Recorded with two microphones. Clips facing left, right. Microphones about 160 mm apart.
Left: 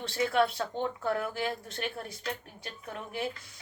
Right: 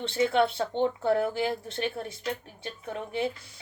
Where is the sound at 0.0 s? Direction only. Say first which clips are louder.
Right 3 dB; 25° right (ahead or behind).